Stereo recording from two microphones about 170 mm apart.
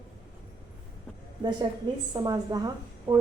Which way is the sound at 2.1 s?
25° right (ahead or behind).